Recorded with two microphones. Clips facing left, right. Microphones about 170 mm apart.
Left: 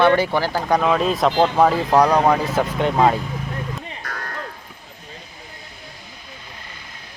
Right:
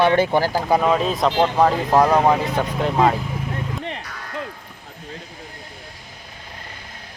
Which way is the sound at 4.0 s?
60° left (ahead or behind).